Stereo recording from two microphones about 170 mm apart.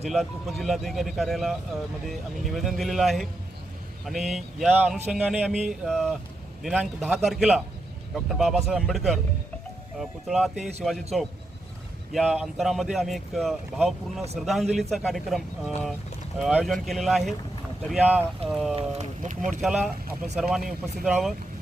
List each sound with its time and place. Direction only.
0.0 s speech: centre (ahead or behind)
18.8 s speech: 45° right (ahead or behind)
19.5 s speech: 5° right (ahead or behind)